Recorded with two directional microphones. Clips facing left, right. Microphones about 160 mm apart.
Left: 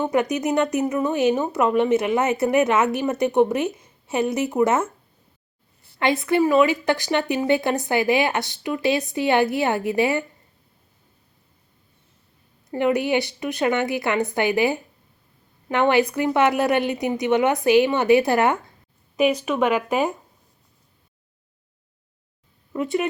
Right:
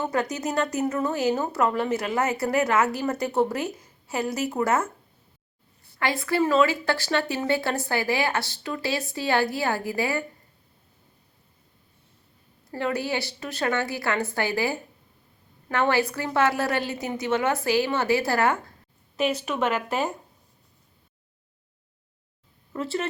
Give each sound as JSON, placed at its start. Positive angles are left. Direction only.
{"t": 0.0, "sound": "a woman's voice", "side_deg": 20}
{"t": 6.0, "sound": "a woman's voice", "side_deg": 20}
{"t": 12.7, "sound": "a woman's voice", "side_deg": 15}
{"t": 22.7, "sound": "speech", "side_deg": 15}